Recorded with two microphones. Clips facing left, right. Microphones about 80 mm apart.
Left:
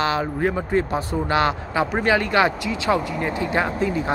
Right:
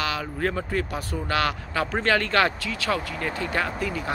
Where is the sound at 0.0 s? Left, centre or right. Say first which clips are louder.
Left 6 dB; left.